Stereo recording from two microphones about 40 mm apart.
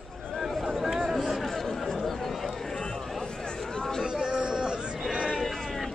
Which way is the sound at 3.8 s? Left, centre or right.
Centre.